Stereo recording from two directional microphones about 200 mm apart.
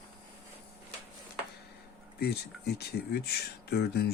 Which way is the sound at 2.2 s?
55° left (ahead or behind).